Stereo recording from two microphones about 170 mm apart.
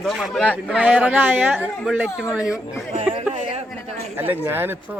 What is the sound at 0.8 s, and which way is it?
Speech, 5° right (ahead or behind).